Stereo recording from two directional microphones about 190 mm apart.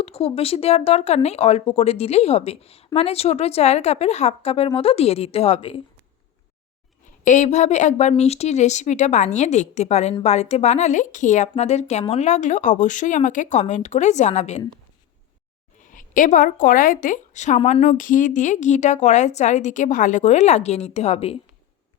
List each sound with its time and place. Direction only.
0.0 s speech: 30° left (ahead or behind)
7.3 s speech: 40° left (ahead or behind)
15.9 s speech: 45° left (ahead or behind)